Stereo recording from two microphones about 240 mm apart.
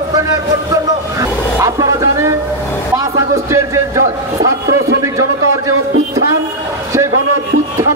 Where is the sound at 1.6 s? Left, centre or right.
Centre.